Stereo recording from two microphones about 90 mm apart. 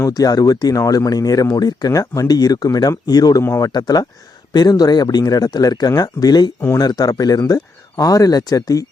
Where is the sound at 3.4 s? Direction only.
30° left (ahead or behind).